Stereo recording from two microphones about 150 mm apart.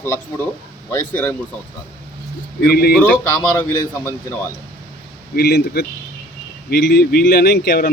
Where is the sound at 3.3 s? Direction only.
20° left (ahead or behind).